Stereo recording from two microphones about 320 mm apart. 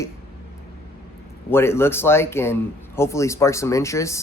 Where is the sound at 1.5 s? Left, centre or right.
Centre.